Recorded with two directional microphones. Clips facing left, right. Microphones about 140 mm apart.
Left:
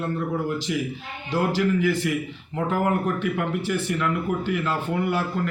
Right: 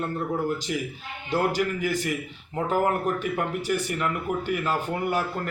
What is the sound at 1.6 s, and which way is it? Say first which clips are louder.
Speech: left 4 dB; 45° right (ahead or behind).